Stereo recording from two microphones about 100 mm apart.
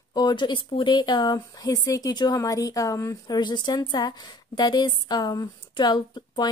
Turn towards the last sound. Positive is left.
turn(degrees=45)  # may be behind; listen again after turning